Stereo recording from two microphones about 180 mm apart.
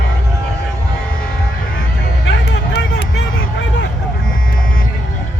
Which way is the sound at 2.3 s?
75° left (ahead or behind).